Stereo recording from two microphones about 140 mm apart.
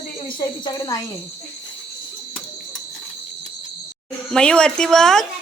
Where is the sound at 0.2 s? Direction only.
35° left (ahead or behind).